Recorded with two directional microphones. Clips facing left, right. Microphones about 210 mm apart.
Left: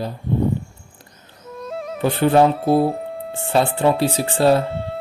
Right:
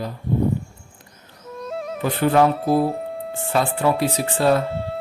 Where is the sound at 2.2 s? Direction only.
30° left (ahead or behind).